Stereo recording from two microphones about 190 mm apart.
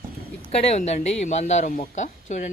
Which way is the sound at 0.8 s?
35° left (ahead or behind).